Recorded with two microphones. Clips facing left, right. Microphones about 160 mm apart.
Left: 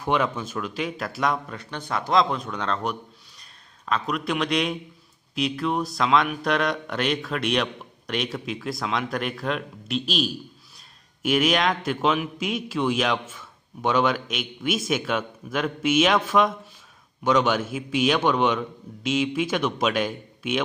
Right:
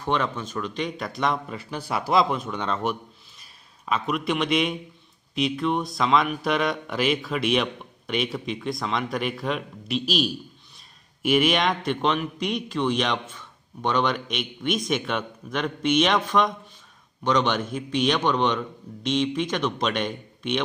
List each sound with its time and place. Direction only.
0.0 s a man's voice: 10° left (ahead or behind)